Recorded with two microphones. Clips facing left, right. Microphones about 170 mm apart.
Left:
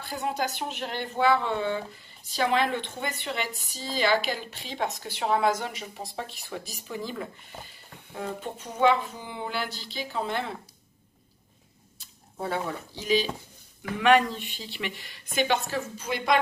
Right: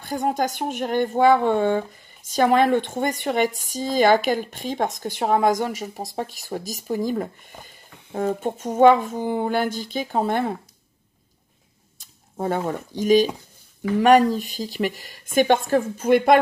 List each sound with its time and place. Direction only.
0.0 s speech: 45° right (ahead or behind)
12.0 s speech: 45° right (ahead or behind)